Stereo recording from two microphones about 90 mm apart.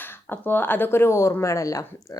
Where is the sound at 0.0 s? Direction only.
20° left (ahead or behind).